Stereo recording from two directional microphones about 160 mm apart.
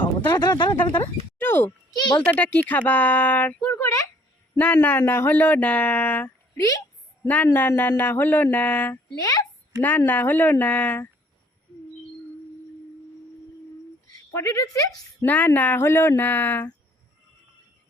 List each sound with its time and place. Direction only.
0.3 s a child's voice: 25° left (ahead or behind)
9.1 s speech: 20° left (ahead or behind)
10.1 s a woman's voice: 10° left (ahead or behind)
14.3 s a woman's voice: 20° left (ahead or behind)